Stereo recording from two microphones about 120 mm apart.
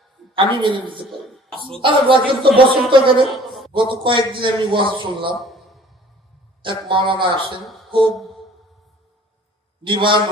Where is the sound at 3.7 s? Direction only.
45° right (ahead or behind).